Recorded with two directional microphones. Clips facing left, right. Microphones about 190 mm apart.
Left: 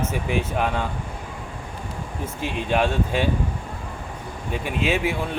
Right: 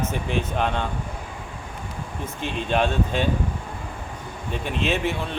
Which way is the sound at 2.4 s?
5° left (ahead or behind).